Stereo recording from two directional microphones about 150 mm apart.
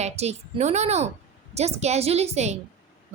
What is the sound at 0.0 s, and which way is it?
A woman's voice, 45° right (ahead or behind).